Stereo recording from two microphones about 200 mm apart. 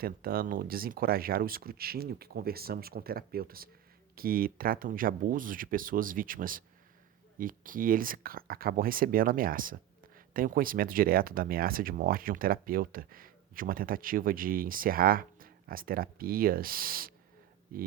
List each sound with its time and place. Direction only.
0.0 s speech: 45° right (ahead or behind)